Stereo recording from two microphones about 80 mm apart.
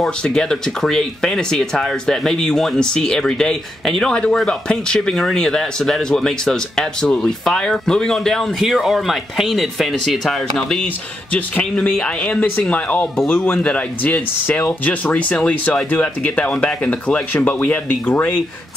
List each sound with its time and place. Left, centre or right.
0.2 s speech: centre
11.3 s speech: centre